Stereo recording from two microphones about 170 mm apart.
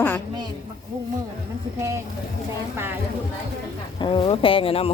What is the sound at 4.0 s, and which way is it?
Speech, 25° left (ahead or behind).